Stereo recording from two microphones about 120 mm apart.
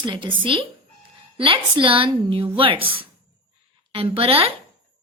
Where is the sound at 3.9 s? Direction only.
50° right (ahead or behind).